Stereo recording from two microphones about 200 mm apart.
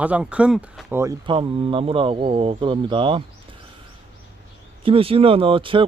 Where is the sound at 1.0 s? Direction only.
20° right (ahead or behind).